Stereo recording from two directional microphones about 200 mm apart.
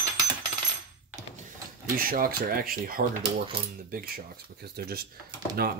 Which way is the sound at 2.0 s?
45° right (ahead or behind).